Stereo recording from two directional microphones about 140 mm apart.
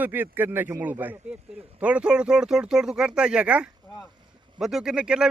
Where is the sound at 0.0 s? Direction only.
15° right (ahead or behind).